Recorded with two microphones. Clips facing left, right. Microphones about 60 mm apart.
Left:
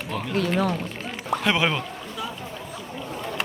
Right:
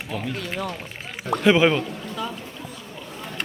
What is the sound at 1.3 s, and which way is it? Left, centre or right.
Speech, centre.